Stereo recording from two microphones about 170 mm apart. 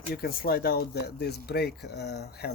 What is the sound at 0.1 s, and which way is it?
Speech, 60° left (ahead or behind).